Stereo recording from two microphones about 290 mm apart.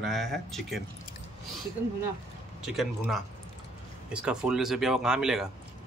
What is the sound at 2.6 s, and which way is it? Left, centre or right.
Speech, centre.